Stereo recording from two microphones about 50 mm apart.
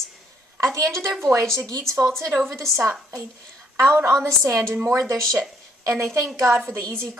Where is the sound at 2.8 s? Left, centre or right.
Right.